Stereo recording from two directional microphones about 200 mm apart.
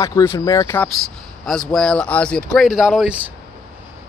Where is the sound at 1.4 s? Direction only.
Centre (ahead or behind).